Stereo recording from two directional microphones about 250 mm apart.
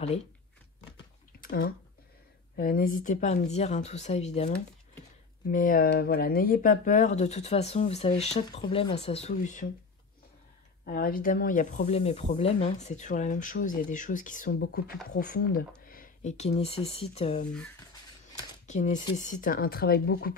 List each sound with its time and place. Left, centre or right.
1.4 s a sound: left
2.5 s speech: left
5.5 s speech: left
10.9 s speech: left
18.7 s speech: left